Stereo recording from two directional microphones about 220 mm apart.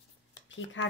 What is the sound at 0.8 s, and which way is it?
Speech, 55° left (ahead or behind).